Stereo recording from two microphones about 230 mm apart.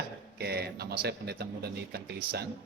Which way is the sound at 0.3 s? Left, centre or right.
Right.